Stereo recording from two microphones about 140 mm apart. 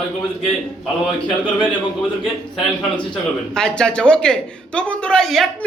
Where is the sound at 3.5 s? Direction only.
5° left (ahead or behind).